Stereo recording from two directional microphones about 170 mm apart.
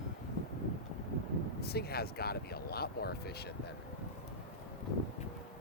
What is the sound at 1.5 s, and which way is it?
Speech, 65° left (ahead or behind).